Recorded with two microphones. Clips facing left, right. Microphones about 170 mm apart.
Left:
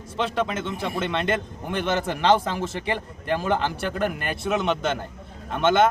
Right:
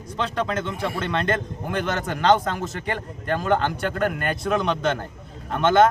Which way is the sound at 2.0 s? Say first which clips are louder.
Right 2 dB; 10° left (ahead or behind).